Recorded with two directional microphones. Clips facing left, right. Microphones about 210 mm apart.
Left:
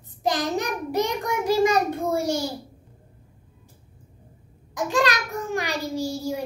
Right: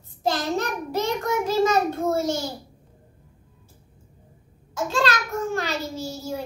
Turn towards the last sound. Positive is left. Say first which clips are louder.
# left 4 dB
turn(degrees=15)  # may be behind; listen again after turning